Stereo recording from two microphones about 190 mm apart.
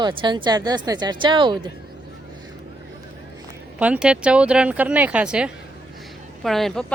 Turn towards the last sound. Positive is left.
turn(degrees=0)  # may be behind; listen again after turning